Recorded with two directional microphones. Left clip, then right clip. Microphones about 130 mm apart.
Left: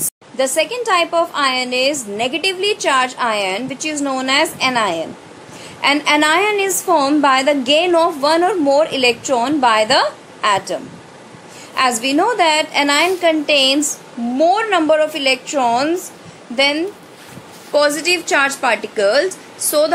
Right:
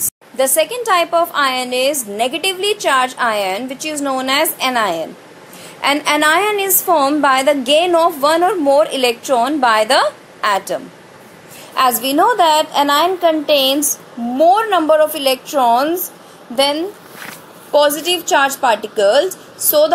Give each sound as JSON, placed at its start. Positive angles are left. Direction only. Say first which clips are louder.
{"t": 0.4, "sound": "a woman's voice", "louder": "right 2 dB", "side_deg": -30}
{"t": 11.7, "sound": "a woman's voice", "louder": "right 1 dB", "side_deg": -30}